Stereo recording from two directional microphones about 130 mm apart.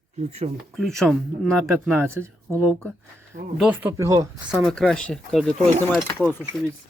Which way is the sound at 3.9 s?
25° right (ahead or behind).